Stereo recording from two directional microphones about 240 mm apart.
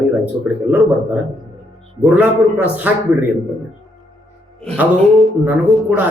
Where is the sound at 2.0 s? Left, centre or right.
Centre.